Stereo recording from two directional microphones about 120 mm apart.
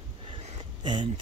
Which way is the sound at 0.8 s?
40° right (ahead or behind).